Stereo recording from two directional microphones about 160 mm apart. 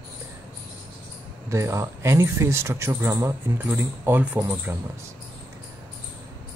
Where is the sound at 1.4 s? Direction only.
15° right (ahead or behind).